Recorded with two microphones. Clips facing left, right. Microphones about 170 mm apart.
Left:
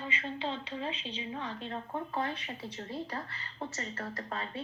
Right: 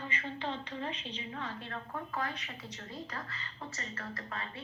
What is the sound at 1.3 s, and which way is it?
Speech, 20° left (ahead or behind).